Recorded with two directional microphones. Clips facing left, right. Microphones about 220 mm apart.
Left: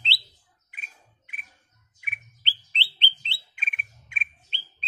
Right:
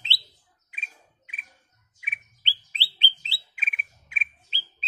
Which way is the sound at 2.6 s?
10° right (ahead or behind).